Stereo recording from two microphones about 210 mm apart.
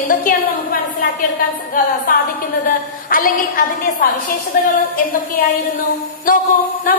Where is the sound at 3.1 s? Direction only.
40° left (ahead or behind).